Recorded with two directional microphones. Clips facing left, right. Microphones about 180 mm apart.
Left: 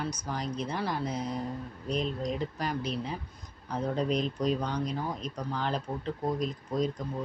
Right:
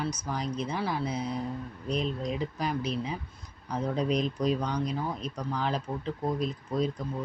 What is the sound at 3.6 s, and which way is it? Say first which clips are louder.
Speech: right 1 dB; 5° left (ahead or behind).